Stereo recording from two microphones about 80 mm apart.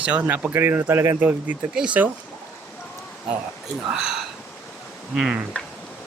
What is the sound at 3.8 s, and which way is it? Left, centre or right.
Speech, centre.